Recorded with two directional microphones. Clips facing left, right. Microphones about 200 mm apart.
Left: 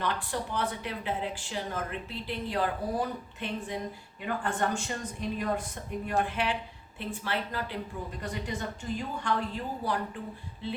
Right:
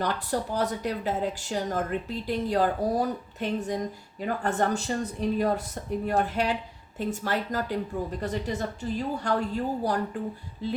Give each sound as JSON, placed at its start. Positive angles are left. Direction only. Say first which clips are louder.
{"t": 0.0, "sound": "speech", "louder": "right 4 dB", "side_deg": -40}